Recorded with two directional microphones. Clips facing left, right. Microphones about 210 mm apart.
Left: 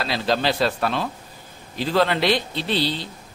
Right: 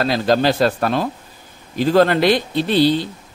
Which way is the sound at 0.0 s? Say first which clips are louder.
Right 6 dB; 45° right (ahead or behind).